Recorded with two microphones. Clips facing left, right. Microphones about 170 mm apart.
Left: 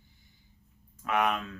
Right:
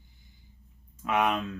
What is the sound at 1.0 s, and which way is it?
Speech, 20° right (ahead or behind).